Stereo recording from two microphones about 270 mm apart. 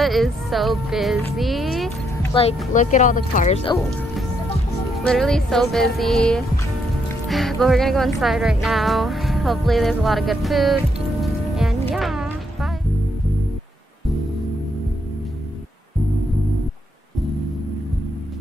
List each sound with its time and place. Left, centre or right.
0.0 s speech: centre
2.7 s speech: left
5.0 s speech: centre
11.9 s music: centre